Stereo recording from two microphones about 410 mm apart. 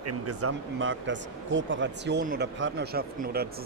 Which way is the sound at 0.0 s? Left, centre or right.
Right.